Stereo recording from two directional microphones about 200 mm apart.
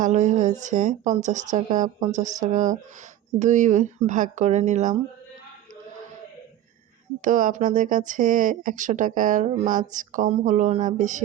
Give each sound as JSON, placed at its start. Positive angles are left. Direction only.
{"t": 0.0, "sound": "speech", "side_deg": -35}
{"t": 7.2, "sound": "speech", "side_deg": -40}